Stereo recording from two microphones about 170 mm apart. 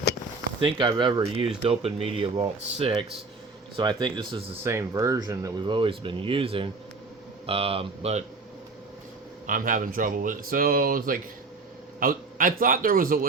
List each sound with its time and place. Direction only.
0.6 s speech: 30° right (ahead or behind)
4.6 s speech: 15° right (ahead or behind); by 8.2 s 35° right (ahead or behind)
9.5 s speech: 50° right (ahead or behind)